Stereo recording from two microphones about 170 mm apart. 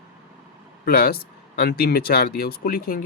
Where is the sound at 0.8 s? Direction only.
60° left (ahead or behind).